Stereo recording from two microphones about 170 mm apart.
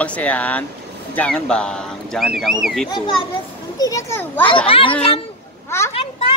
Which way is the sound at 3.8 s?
20° left (ahead or behind).